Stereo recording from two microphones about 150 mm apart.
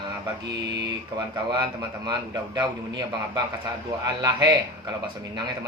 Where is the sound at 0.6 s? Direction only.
25° right (ahead or behind).